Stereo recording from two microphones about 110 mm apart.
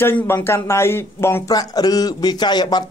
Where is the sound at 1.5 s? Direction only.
35° left (ahead or behind).